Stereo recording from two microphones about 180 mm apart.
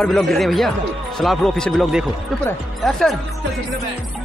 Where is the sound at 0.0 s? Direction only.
Centre (ahead or behind).